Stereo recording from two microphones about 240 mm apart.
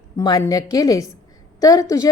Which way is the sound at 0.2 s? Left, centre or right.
Centre.